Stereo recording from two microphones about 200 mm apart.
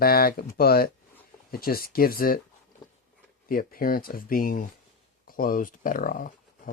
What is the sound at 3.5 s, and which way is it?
Speech, 45° left (ahead or behind).